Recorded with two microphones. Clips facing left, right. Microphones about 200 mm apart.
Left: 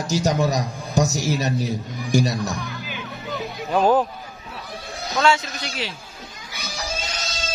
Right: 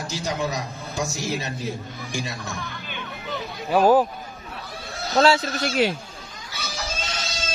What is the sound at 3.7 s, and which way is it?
Speech, 5° right (ahead or behind).